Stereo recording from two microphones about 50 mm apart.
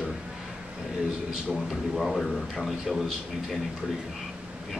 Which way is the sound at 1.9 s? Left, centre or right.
Centre.